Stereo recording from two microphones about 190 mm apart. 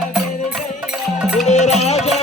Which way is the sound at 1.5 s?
35° left (ahead or behind).